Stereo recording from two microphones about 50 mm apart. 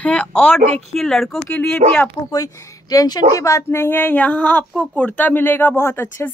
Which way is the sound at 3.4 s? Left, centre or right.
Left.